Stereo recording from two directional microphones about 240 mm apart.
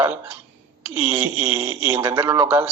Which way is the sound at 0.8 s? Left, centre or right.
Centre.